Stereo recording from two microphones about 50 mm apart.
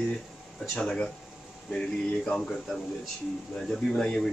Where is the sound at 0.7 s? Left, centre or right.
Centre.